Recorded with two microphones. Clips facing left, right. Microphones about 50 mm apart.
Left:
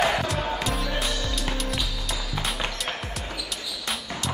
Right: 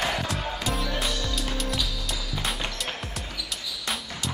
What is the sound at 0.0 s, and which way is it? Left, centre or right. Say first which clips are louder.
Music: left 5 dB; centre.